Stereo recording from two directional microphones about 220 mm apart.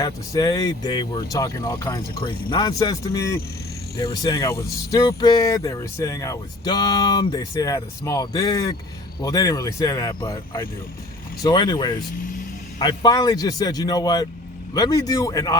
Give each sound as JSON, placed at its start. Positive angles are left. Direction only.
{"t": 0.0, "sound": "speech", "side_deg": 15}